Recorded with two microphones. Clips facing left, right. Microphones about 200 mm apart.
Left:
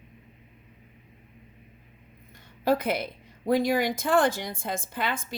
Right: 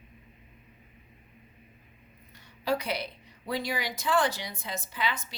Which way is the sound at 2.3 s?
50° left (ahead or behind).